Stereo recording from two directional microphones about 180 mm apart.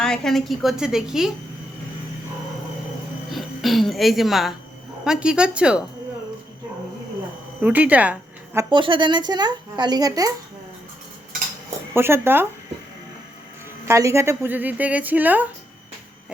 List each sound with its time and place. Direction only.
0.0 s a woman's voice: 5° left (ahead or behind)
3.2 s a woman's voice: centre (ahead or behind)
7.6 s a woman's voice: 10° right (ahead or behind)
8.7 s speech: 25° right (ahead or behind)
11.9 s speech: 15° right (ahead or behind)
13.8 s speech: 15° right (ahead or behind)